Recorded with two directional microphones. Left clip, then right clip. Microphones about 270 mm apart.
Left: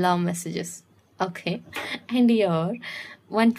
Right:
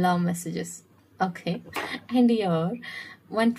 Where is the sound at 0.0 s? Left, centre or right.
Left.